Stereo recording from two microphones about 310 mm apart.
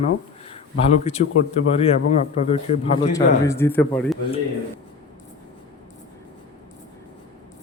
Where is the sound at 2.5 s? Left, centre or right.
Centre.